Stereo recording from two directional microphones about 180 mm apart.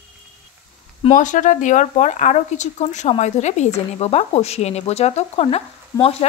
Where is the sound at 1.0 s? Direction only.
45° left (ahead or behind).